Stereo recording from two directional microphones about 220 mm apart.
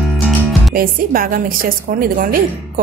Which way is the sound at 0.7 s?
40° right (ahead or behind).